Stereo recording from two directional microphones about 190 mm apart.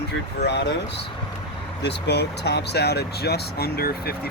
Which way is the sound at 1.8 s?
60° left (ahead or behind).